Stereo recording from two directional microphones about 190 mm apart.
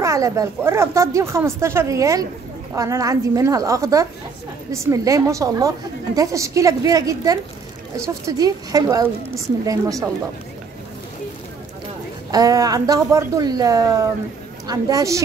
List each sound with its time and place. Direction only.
0.0 s speech: 15° right (ahead or behind)
12.3 s a woman's voice: 20° right (ahead or behind)